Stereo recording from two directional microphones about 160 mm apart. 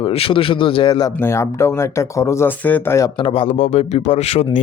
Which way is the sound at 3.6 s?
45° left (ahead or behind).